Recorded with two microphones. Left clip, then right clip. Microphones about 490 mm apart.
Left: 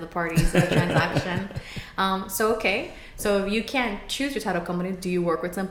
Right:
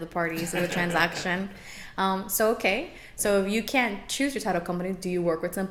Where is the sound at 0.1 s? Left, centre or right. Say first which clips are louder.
Left 4 dB; right.